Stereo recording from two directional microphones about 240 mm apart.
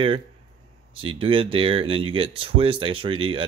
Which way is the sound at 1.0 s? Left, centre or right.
Right.